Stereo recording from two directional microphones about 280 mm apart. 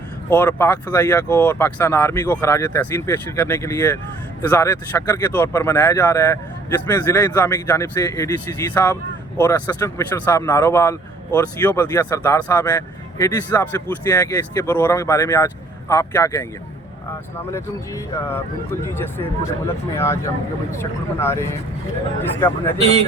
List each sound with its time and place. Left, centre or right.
0.3 s speech: centre
22.8 s speech: right